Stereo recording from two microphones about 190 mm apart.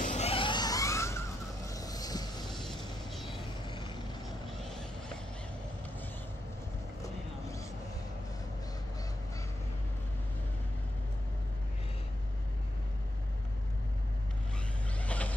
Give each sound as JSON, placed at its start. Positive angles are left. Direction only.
{"t": 0.0, "sound": "vehicle", "side_deg": 35}
{"t": 2.4, "sound": "a sound", "side_deg": 0}
{"t": 3.6, "sound": "vehicle", "side_deg": 25}
{"t": 4.5, "sound": "vehicle", "side_deg": 0}
{"t": 15.0, "sound": "vehicle", "side_deg": 5}